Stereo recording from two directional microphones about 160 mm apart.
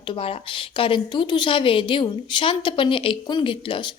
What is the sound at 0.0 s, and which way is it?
A woman's voice, 35° left (ahead or behind).